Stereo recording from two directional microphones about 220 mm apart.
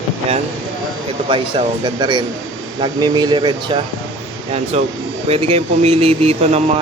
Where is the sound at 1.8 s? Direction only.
20° right (ahead or behind).